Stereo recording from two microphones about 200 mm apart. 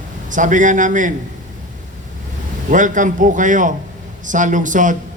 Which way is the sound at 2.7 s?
40° right (ahead or behind).